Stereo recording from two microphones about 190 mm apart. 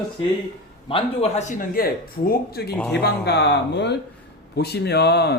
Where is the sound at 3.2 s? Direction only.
60° left (ahead or behind).